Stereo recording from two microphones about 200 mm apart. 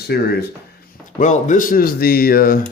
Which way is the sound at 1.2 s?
40° left (ahead or behind).